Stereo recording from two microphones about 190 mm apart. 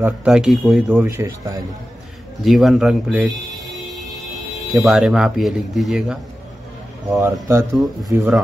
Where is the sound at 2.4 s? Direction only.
Centre (ahead or behind).